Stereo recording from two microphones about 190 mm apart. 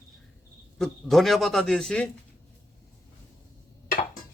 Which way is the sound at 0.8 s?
Centre (ahead or behind).